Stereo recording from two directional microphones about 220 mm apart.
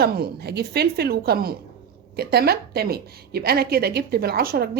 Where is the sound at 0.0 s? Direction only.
45° right (ahead or behind).